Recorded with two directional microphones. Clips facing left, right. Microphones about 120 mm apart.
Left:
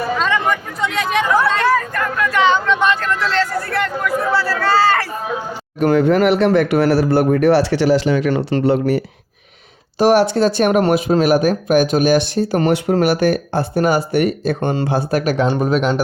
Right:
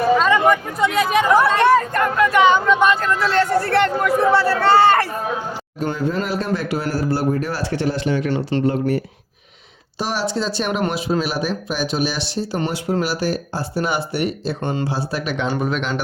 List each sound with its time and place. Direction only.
0.3 s chatter: 15° right (ahead or behind)
1.3 s speech: 20° right (ahead or behind)
3.4 s speech: 30° right (ahead or behind)
5.8 s speech: 70° left (ahead or behind)
10.0 s speech: 55° left (ahead or behind)